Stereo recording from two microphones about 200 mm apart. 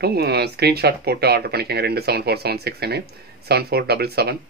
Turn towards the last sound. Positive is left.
turn(degrees=-55)  # may be behind; listen again after turning